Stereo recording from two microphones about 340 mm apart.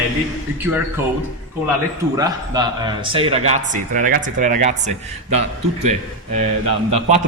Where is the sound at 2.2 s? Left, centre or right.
Centre.